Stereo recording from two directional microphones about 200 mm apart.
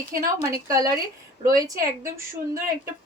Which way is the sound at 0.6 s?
15° right (ahead or behind).